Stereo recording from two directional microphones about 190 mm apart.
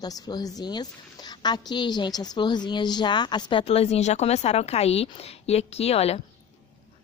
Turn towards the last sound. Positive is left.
turn(degrees=30)  # may be behind; listen again after turning